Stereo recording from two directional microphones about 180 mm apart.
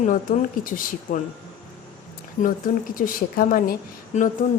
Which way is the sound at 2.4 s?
50° left (ahead or behind).